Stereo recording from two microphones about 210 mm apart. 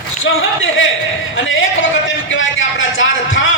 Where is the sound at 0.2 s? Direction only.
70° left (ahead or behind).